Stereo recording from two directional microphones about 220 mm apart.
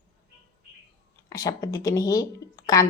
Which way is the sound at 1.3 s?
15° left (ahead or behind).